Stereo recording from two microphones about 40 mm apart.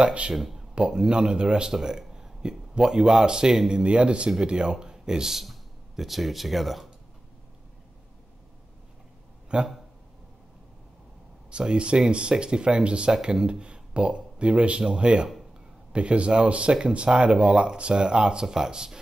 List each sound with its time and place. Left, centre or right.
0.0 s speech: right
0.3 s speech: centre
0.7 s speech: right
3.8 s speech: right; by 6.9 s centre
9.5 s speech: right
11.5 s speech: right
13.1 s speech: centre